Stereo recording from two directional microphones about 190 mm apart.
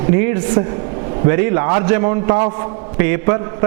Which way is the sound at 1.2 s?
15° right (ahead or behind).